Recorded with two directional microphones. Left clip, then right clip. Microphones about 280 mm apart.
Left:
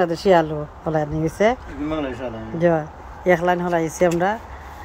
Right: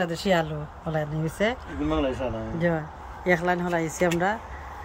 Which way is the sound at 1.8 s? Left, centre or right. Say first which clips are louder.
Even; right.